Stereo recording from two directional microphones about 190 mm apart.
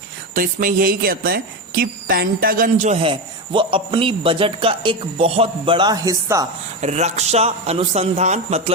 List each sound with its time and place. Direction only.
0.3 s speech: 45° right (ahead or behind); by 6.5 s 15° right (ahead or behind)
6.8 s a man's voice: 35° right (ahead or behind)